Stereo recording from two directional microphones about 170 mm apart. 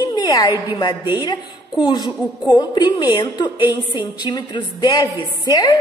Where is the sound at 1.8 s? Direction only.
25° left (ahead or behind).